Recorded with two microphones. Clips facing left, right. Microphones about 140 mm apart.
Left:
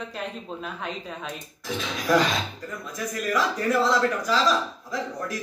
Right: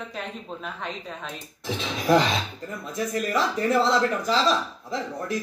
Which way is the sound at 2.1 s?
25° right (ahead or behind).